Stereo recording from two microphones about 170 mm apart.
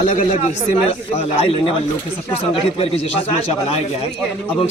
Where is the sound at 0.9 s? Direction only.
35° left (ahead or behind).